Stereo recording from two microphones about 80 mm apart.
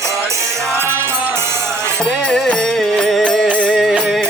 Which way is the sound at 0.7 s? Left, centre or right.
Right.